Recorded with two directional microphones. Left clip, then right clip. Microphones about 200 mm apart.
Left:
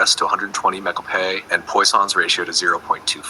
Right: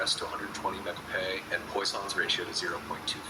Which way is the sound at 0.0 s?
50° left (ahead or behind).